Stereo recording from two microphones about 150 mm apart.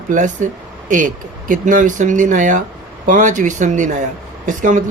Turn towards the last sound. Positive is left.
turn(degrees=-55)  # may be behind; listen again after turning